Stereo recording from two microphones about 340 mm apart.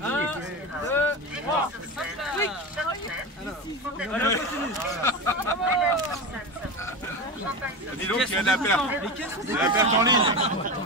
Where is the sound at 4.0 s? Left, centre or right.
Centre.